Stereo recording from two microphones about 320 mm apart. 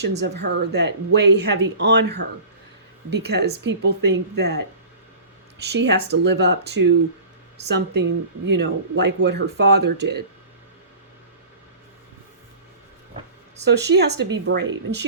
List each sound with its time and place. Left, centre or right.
0.0 s speech: right
5.7 s speech: right
8.4 s speech: right
13.7 s speech: right